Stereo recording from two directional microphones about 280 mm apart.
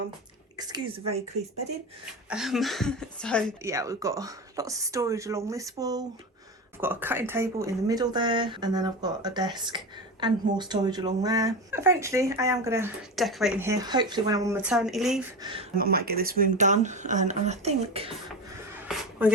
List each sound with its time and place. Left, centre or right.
0.5 s speech: centre
2.3 s speech: centre
3.6 s speech: centre
15.4 s speech: centre
15.8 s speech: right